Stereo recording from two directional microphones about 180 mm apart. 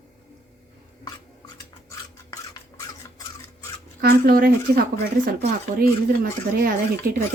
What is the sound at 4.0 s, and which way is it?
Speech, 60° right (ahead or behind).